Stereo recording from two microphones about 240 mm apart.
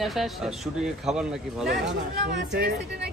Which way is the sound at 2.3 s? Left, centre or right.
Right.